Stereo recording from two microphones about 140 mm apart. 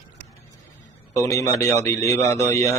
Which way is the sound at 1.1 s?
25° left (ahead or behind).